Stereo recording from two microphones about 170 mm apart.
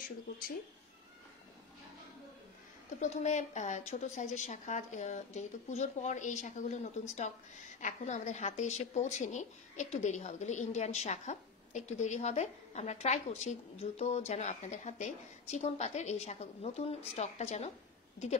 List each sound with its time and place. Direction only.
3.0 s a woman's voice: 45° left (ahead or behind)